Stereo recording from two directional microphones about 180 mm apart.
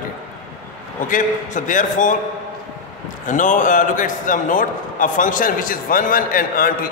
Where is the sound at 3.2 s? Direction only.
45° left (ahead or behind).